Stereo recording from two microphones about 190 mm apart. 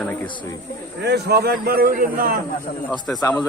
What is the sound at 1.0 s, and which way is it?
A man's voice, 60° right (ahead or behind).